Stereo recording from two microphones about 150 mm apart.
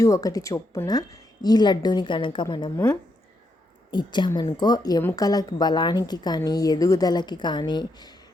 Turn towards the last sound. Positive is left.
turn(degrees=30)  # may be behind; listen again after turning